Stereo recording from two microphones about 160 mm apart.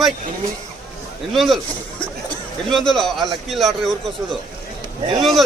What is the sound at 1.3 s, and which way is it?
Speech, centre (ahead or behind).